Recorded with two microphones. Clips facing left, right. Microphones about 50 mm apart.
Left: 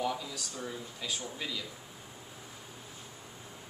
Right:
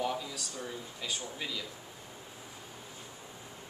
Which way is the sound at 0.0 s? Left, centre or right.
Centre.